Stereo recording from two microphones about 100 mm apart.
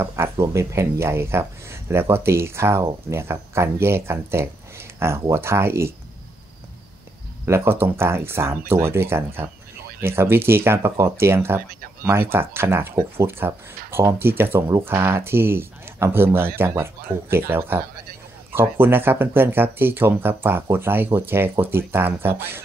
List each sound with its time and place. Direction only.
0.0 s speech: 25° right (ahead or behind)
7.4 s speech: 25° right (ahead or behind)